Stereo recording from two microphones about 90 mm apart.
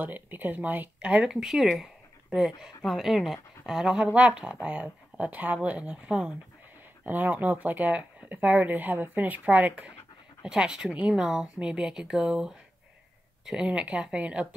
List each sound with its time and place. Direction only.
0.0 s speech: 20° right (ahead or behind)